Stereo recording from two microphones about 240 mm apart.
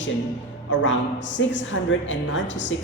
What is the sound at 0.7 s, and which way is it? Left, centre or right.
A woman's voice, left.